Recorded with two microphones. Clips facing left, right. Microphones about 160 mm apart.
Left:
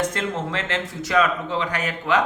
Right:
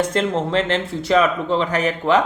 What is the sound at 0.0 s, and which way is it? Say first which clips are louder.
Speech: right 5 dB; 30° right (ahead or behind).